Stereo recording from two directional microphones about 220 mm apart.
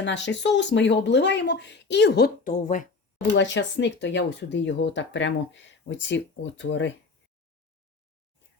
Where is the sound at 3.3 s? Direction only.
55° left (ahead or behind).